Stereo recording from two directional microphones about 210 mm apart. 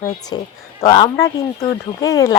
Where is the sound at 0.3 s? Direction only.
20° left (ahead or behind).